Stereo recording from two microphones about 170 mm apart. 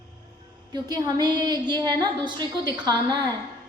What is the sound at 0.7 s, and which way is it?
A woman's voice, 25° right (ahead or behind).